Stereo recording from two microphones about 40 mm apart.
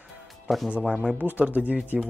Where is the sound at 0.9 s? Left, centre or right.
Centre.